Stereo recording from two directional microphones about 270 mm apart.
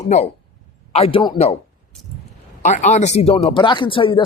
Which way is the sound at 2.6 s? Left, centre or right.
Left.